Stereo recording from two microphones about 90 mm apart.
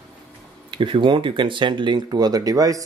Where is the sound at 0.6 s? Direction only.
70° right (ahead or behind).